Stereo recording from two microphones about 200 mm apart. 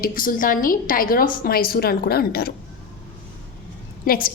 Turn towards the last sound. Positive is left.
turn(degrees=45)  # may be behind; listen again after turning